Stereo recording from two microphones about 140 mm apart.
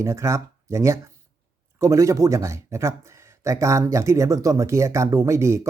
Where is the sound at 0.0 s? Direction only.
20° right (ahead or behind).